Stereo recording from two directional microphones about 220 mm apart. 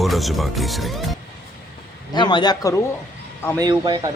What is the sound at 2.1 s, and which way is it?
Speech, 20° left (ahead or behind).